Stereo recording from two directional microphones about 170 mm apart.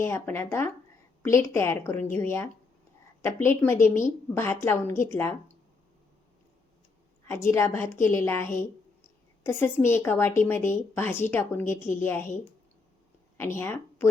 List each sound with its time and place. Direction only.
0.0 s a woman's voice: 15° left (ahead or behind)
7.3 s a woman's voice: 15° left (ahead or behind)